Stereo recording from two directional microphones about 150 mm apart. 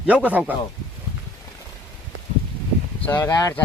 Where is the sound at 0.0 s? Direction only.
10° right (ahead or behind).